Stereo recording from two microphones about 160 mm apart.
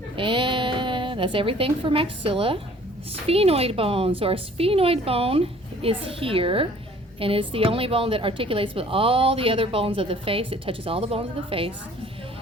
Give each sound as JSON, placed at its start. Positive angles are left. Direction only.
{"t": 0.2, "sound": "a woman's voice", "side_deg": -30}